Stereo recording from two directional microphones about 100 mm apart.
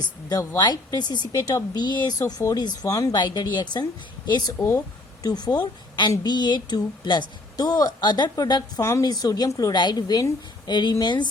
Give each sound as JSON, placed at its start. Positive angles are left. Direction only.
{"t": 0.3, "sound": "speech", "side_deg": 40}
{"t": 4.6, "sound": "a woman's voice", "side_deg": 35}
{"t": 8.8, "sound": "a woman's voice", "side_deg": 30}
{"t": 9.0, "sound": "a woman's voice", "side_deg": 40}